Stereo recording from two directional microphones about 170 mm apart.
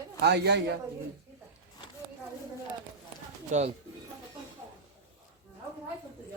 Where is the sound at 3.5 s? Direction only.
45° right (ahead or behind).